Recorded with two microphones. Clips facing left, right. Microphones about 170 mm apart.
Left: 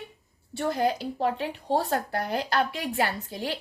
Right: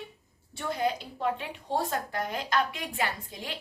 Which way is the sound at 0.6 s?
40° left (ahead or behind).